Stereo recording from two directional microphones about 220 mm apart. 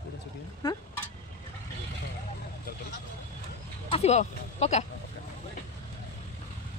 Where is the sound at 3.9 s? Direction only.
30° left (ahead or behind).